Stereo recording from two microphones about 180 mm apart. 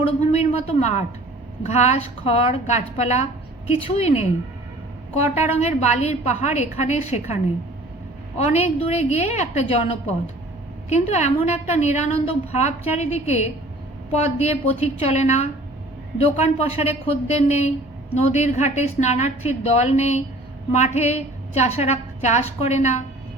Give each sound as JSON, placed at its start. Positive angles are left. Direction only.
{"t": 0.0, "sound": "a woman's voice", "side_deg": 35}
{"t": 8.4, "sound": "a woman's voice", "side_deg": 35}
{"t": 10.8, "sound": "a woman's voice", "side_deg": 40}